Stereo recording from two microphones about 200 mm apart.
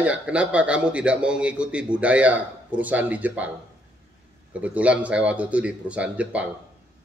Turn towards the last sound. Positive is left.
turn(degrees=-5)  # may be behind; listen again after turning